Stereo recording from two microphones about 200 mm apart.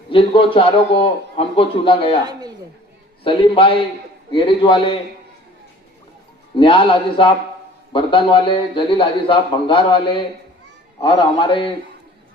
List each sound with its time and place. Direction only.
0.1 s a man's voice: 25° left (ahead or behind)
2.2 s speech: 20° right (ahead or behind)
3.2 s a man's voice: 25° left (ahead or behind)
6.6 s a man's voice: 25° left (ahead or behind)